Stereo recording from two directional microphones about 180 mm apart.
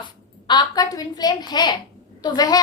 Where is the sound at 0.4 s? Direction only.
20° left (ahead or behind).